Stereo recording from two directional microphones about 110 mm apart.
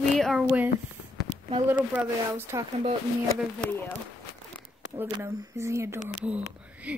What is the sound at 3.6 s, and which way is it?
Speech, 20° left (ahead or behind).